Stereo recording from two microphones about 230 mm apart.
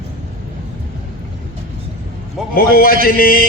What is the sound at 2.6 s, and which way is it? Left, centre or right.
Speech, left.